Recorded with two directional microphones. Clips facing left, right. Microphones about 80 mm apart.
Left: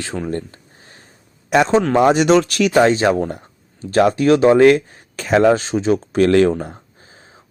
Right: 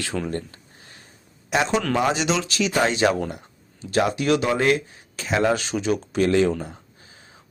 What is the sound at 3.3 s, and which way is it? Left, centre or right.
Speech, left.